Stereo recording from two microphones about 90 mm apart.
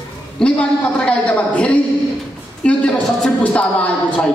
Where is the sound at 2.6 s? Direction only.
15° left (ahead or behind).